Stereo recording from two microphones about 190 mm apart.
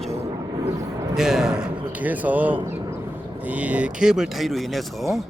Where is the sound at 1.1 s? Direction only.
5° right (ahead or behind).